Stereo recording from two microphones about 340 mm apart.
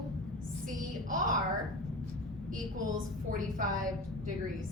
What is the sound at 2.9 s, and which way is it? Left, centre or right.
Speech, right.